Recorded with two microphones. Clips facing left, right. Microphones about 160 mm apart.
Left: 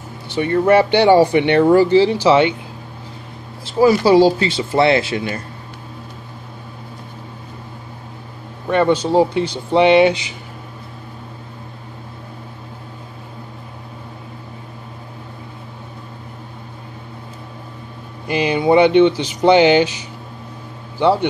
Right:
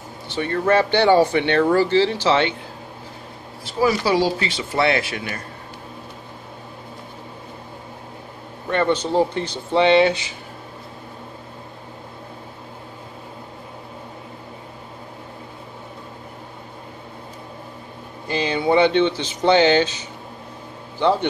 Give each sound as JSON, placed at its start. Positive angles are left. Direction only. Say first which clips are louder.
{"t": 0.3, "sound": "speech", "louder": "left 5 dB", "side_deg": 15}
{"t": 3.6, "sound": "speech", "louder": "left 7 dB", "side_deg": 30}
{"t": 8.6, "sound": "speech", "louder": "left 5 dB", "side_deg": 10}
{"t": 18.2, "sound": "speech", "louder": "left 4 dB", "side_deg": 10}